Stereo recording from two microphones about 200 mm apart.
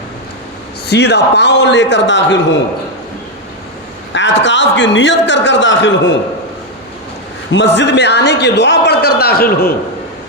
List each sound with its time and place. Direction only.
0.9 s a man's voice: 55° left (ahead or behind)
4.1 s a man's voice: 65° left (ahead or behind)
7.5 s a man's voice: 60° left (ahead or behind)